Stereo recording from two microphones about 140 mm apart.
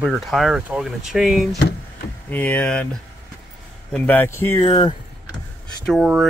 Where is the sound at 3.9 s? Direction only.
15° left (ahead or behind).